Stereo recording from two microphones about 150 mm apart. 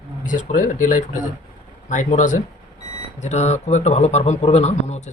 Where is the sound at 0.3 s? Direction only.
60° left (ahead or behind).